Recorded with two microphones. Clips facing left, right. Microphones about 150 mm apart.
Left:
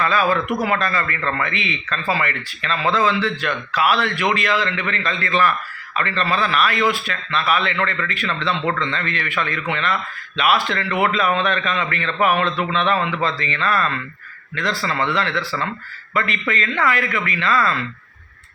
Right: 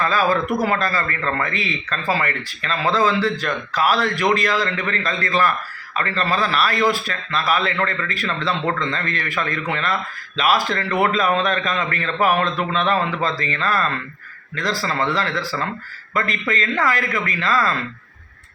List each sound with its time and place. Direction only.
0.0 s speech: 35° right (ahead or behind)